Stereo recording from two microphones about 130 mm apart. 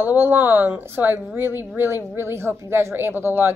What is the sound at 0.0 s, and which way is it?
A woman's voice, 15° right (ahead or behind).